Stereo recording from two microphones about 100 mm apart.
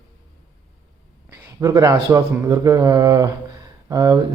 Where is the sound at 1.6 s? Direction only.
35° right (ahead or behind).